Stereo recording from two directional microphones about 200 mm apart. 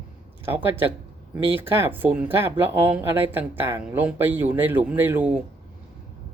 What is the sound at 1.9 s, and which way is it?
Speech, 10° right (ahead or behind).